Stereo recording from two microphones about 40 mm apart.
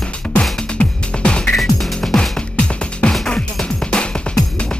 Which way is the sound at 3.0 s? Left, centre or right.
Left.